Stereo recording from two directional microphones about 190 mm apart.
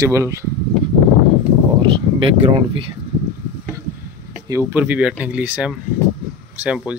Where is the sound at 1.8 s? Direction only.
25° right (ahead or behind).